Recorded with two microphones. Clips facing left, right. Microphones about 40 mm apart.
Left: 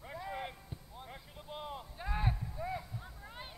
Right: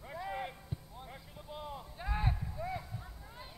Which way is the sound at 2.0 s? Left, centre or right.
Centre.